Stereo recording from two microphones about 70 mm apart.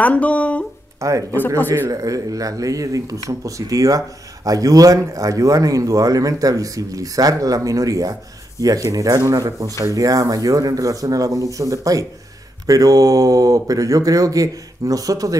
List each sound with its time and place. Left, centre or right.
0.0 s speech: left
0.9 s speech: right